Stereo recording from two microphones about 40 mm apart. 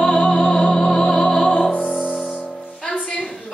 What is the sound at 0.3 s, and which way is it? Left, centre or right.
Music, centre.